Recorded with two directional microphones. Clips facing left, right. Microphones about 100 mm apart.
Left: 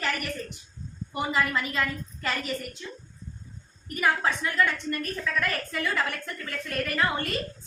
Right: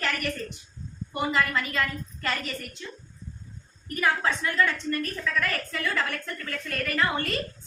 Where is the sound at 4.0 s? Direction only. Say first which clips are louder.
Even; 15° left (ahead or behind).